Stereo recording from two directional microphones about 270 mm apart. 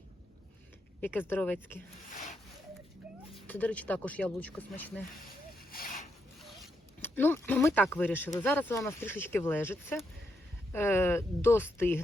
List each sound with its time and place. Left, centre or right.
1.0 s speech: centre
3.4 s speech: centre
5.7 s a sound: left
6.4 s zipper: centre
8.4 s speech: centre